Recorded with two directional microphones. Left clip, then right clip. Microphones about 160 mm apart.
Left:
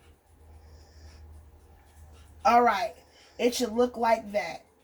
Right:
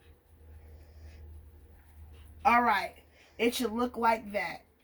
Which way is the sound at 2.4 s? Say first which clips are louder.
Left 3 dB; 25° left (ahead or behind).